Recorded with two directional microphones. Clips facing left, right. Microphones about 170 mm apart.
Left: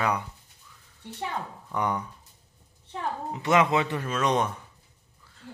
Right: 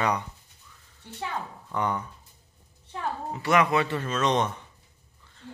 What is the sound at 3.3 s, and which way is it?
Speech, 20° left (ahead or behind).